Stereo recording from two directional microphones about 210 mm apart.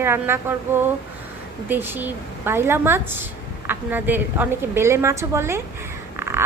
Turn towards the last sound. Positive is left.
turn(degrees=-10)  # may be behind; listen again after turning